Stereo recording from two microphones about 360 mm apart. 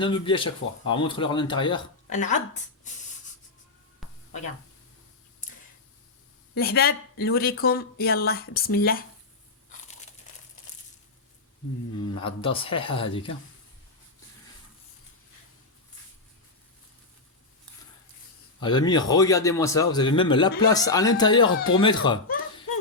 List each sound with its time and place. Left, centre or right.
0.0 s speech: centre
4.0 s a sound: centre
6.5 s speech: left
11.9 s speech: centre
18.6 s speech: centre